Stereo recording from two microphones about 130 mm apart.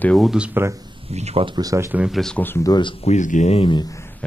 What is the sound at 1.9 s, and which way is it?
Speech, 10° right (ahead or behind).